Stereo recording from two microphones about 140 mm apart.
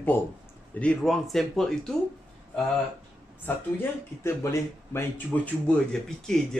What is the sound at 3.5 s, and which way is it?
Speech, 15° left (ahead or behind).